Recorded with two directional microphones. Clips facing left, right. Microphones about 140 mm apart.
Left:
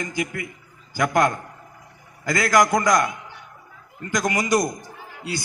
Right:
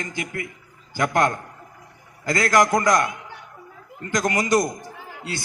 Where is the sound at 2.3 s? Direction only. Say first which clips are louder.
Even; 30° right (ahead or behind).